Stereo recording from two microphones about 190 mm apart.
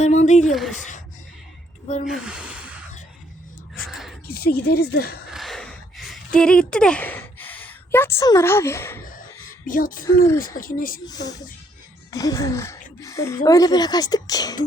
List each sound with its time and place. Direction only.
0.0 s speech: 40° left (ahead or behind)
2.0 s speech: 5° right (ahead or behind)
3.8 s a sound: centre (ahead or behind)
4.3 s speech: 55° left (ahead or behind)
5.3 s a sound: centre (ahead or behind)
9.6 s speech: 45° left (ahead or behind)
10.2 s music: 15° left (ahead or behind)
10.6 s speech: 45° left (ahead or behind)
11.0 s a woman's voice: 20° left (ahead or behind)
12.1 s music: 20° left (ahead or behind)
13.0 s a woman's voice: 15° left (ahead or behind)